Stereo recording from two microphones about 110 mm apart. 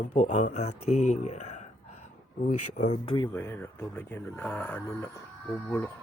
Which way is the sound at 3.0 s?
50° left (ahead or behind).